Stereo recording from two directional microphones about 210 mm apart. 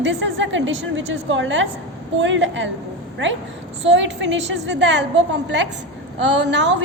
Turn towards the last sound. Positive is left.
turn(degrees=-55)  # may be behind; listen again after turning